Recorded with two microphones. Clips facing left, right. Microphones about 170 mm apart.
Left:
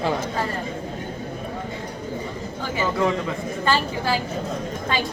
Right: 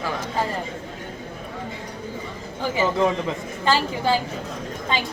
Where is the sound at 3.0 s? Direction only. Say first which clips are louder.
Right 1 dB; 20° right (ahead or behind).